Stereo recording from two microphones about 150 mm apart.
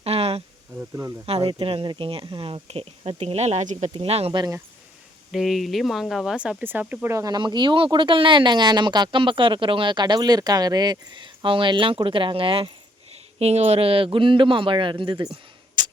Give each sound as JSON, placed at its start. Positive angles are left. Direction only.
{"t": 0.0, "sound": "a sound", "side_deg": -40}
{"t": 1.4, "sound": "speech", "side_deg": -35}
{"t": 4.4, "sound": "speech", "side_deg": -25}
{"t": 5.3, "sound": "speech", "side_deg": 0}